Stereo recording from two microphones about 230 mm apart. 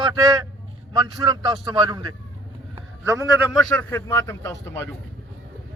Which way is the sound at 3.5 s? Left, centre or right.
Centre.